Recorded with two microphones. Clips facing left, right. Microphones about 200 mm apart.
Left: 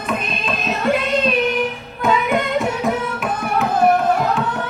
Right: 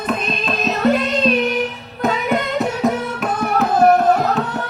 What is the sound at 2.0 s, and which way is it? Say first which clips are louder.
Music: left 1 dB; 40° right (ahead or behind).